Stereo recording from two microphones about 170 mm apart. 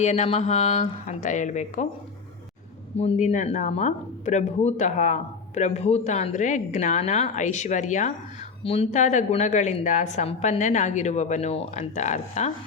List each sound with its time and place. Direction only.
0.0 s speech: 40° left (ahead or behind)
3.0 s speech: 40° left (ahead or behind)